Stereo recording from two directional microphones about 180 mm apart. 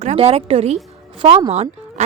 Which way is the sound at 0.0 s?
35° right (ahead or behind).